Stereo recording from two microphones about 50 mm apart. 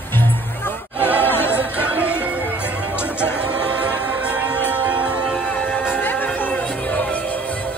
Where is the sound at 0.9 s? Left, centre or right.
Right.